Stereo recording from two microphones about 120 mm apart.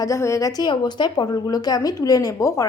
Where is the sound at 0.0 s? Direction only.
25° left (ahead or behind).